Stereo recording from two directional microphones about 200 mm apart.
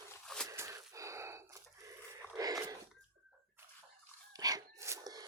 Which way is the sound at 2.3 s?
15° right (ahead or behind).